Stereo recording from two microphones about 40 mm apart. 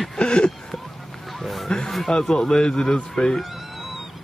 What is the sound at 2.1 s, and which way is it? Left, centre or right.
A man's voice, centre.